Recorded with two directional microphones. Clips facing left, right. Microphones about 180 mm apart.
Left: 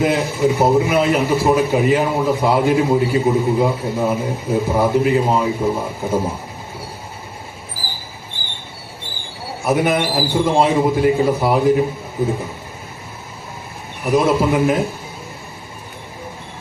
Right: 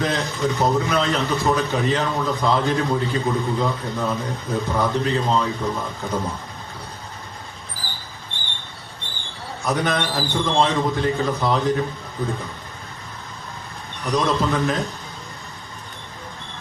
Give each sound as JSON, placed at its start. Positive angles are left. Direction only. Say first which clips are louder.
{"t": 0.0, "sound": "a man's voice", "louder": "left 6 dB", "side_deg": 10}
{"t": 4.0, "sound": "speech", "louder": "left 6 dB", "side_deg": 20}
{"t": 4.8, "sound": "a man's voice", "louder": "left 7 dB", "side_deg": 10}
{"t": 6.1, "sound": "speech", "louder": "left 6 dB", "side_deg": 25}
{"t": 7.8, "sound": "mouse", "louder": "left 3 dB", "side_deg": 10}
{"t": 9.6, "sound": "a man's voice", "louder": "left 6 dB", "side_deg": 10}
{"t": 14.0, "sound": "a man's voice", "louder": "left 6 dB", "side_deg": 10}